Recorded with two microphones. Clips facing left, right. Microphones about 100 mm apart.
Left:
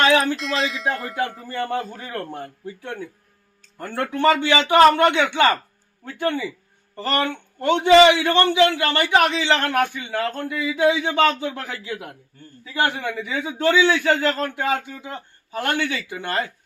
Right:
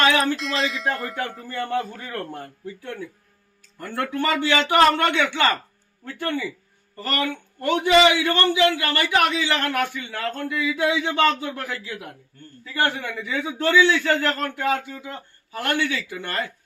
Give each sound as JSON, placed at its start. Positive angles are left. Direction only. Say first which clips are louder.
{"t": 0.0, "sound": "a sound", "louder": "left 2 dB", "side_deg": 25}
{"t": 0.3, "sound": "speech", "louder": "left 1 dB", "side_deg": 0}
{"t": 1.5, "sound": "a man's voice", "louder": "even", "side_deg": 25}
{"t": 6.9, "sound": "a man's voice", "louder": "left 3 dB", "side_deg": 25}